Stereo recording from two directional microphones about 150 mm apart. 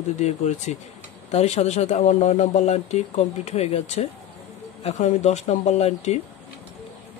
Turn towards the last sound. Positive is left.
turn(degrees=45)  # may be behind; listen again after turning